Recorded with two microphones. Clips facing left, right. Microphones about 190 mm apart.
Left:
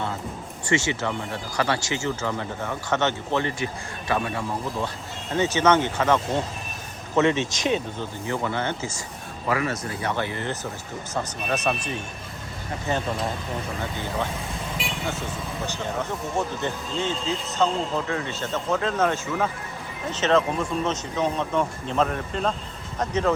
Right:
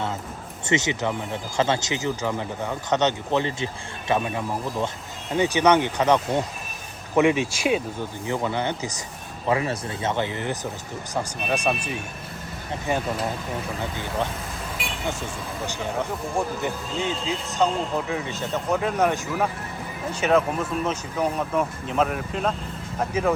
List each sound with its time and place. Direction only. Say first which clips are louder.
0.6 s speech: right 1 dB; 20° right (ahead or behind)
9.5 s speech: right 2 dB; 25° right (ahead or behind); by 13.0 s 10° right (ahead or behind)
15.6 s speech: right 2 dB; 15° right (ahead or behind)